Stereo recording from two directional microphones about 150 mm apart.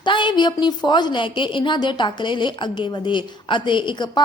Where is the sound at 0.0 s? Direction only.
30° left (ahead or behind).